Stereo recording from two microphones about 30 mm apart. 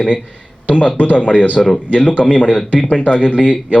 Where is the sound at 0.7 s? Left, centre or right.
Left.